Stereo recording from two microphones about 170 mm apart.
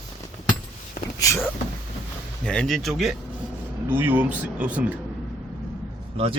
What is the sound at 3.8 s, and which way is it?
Speech, 10° right (ahead or behind).